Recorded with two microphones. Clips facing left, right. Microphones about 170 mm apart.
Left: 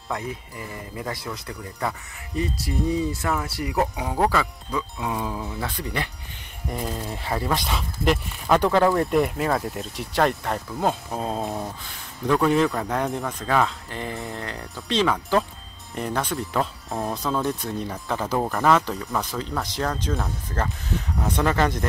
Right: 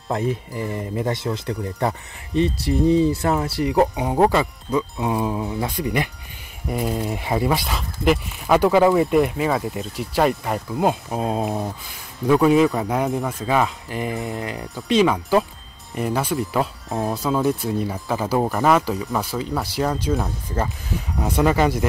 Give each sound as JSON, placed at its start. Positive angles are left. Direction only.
{"t": 0.1, "sound": "speech", "side_deg": -25}
{"t": 12.7, "sound": "speech", "side_deg": -20}
{"t": 13.0, "sound": "speech", "side_deg": 0}